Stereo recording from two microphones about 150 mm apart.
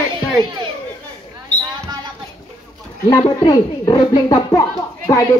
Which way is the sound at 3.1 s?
30° left (ahead or behind).